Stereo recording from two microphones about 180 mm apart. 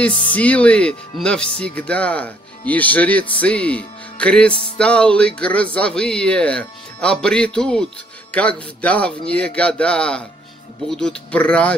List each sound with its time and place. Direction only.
0.3 s speech: 5° left (ahead or behind)